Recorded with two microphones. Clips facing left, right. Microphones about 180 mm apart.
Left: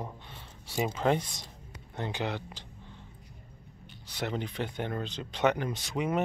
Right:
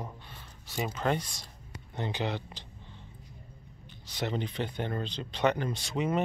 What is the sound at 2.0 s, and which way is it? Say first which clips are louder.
Speech: right 1 dB; 10° left (ahead or behind).